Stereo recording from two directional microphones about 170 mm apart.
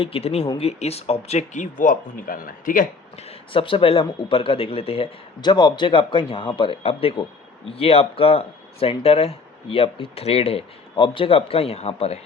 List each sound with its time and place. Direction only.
0.0 s speech: 35° left (ahead or behind); by 2.8 s 55° left (ahead or behind)
3.2 s speech: 35° left (ahead or behind)